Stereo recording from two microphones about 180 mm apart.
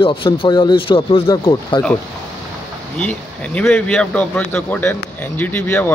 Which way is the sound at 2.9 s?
5° left (ahead or behind).